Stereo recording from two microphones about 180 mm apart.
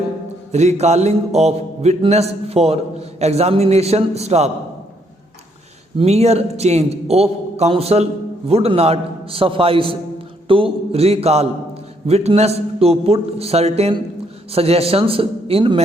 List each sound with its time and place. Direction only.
0.5 s mantra: 40° right (ahead or behind)
6.0 s mantra: 35° right (ahead or behind)